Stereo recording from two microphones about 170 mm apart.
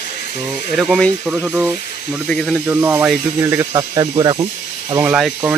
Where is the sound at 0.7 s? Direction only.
Centre (ahead or behind).